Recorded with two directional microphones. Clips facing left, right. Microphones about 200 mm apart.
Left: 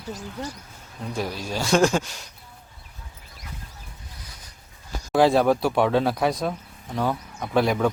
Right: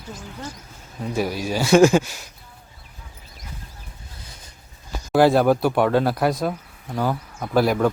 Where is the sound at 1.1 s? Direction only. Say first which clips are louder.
Right 5 dB; 5° right (ahead or behind).